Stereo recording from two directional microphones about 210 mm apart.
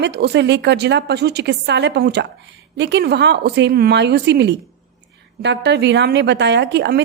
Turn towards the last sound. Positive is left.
turn(degrees=-55)  # may be behind; listen again after turning